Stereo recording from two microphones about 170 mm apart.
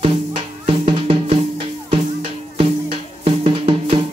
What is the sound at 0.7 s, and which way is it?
Music, 35° right (ahead or behind).